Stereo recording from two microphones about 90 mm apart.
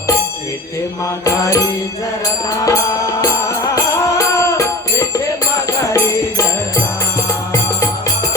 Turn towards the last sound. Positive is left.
turn(degrees=35)  # may be behind; listen again after turning